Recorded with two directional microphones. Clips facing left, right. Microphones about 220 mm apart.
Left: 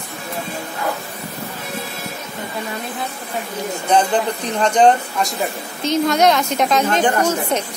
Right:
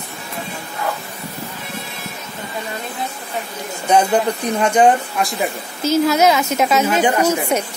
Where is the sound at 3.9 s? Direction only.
10° right (ahead or behind).